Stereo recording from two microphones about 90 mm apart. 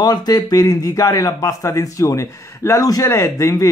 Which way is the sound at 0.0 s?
45° left (ahead or behind).